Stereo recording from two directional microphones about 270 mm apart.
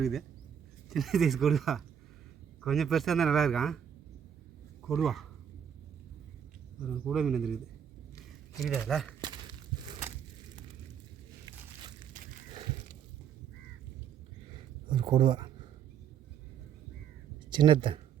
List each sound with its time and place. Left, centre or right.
0.0 s speech: centre
4.9 s speech: centre
7.0 s speech: centre
9.2 s crushing: centre
14.8 s a sound: centre
17.5 s speech: centre